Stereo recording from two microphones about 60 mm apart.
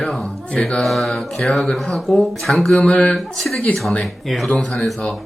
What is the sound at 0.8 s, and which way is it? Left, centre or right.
Speech, centre.